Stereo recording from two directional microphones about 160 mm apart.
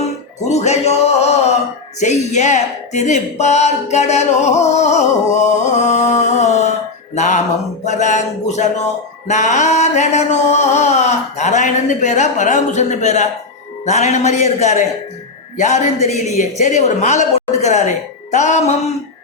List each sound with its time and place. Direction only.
0.0 s music: 45° left (ahead or behind)
2.0 s speech: 45° left (ahead or behind)